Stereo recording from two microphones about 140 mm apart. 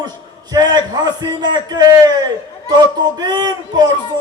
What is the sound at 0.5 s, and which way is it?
A man's voice, 30° right (ahead or behind).